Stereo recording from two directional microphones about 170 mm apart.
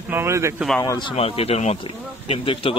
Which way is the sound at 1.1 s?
35° left (ahead or behind).